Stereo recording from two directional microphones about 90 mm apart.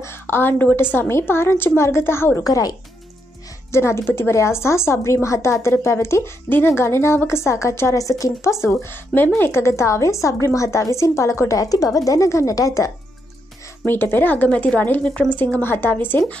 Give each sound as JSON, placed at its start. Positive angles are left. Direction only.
{"t": 0.0, "sound": "a woman's voice", "side_deg": 25}
{"t": 2.4, "sound": "a child's voice", "side_deg": 45}
{"t": 3.7, "sound": "a woman's voice", "side_deg": 30}
{"t": 13.8, "sound": "speech", "side_deg": 20}